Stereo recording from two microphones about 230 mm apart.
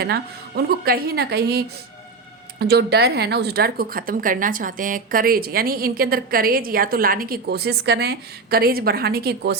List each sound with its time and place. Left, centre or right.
0.0 s speech: right